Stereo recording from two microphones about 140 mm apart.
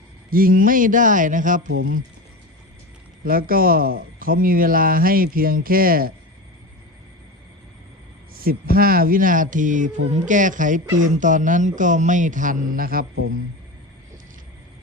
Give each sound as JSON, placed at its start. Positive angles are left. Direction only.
{"t": 0.3, "sound": "speech", "side_deg": -90}
{"t": 3.2, "sound": "speech", "side_deg": -90}
{"t": 8.3, "sound": "speech", "side_deg": -90}